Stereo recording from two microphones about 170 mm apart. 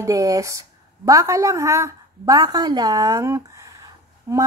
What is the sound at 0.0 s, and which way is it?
A woman's voice, 20° right (ahead or behind).